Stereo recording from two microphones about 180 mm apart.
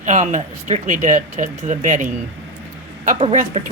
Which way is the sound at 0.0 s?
40° right (ahead or behind).